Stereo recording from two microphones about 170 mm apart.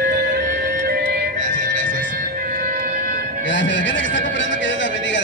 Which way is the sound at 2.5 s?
50° right (ahead or behind).